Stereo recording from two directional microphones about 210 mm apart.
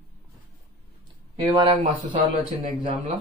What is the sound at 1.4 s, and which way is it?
Speech, 20° right (ahead or behind).